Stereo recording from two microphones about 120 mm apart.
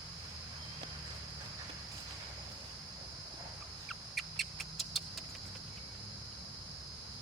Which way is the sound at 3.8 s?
Centre (ahead or behind).